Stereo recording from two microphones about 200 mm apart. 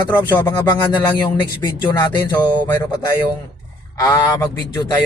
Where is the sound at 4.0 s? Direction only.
15° left (ahead or behind).